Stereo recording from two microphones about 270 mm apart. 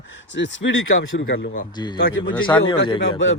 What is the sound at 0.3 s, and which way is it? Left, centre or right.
Speech, left.